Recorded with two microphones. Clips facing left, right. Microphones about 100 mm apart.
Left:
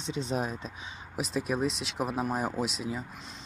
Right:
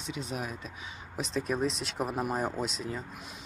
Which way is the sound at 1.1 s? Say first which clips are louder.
Left 1 dB; 10° left (ahead or behind).